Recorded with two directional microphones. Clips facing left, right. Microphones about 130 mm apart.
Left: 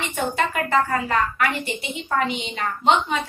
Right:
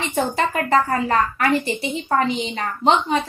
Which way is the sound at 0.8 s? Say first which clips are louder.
Right 3 dB; 40° right (ahead or behind).